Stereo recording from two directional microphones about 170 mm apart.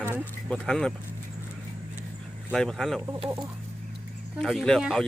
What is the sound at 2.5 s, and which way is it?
Speech, 5° left (ahead or behind).